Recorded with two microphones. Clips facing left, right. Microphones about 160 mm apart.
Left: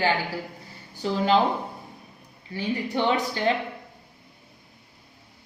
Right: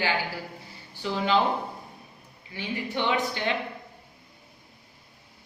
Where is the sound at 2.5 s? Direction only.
35° left (ahead or behind).